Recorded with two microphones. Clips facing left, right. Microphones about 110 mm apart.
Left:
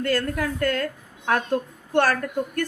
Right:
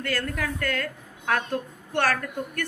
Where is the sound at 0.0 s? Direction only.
40° left (ahead or behind).